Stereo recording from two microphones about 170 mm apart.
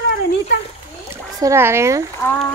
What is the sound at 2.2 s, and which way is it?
Speech, 10° left (ahead or behind).